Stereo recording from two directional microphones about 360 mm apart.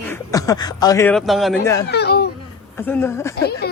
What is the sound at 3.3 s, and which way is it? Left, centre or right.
Speech, left.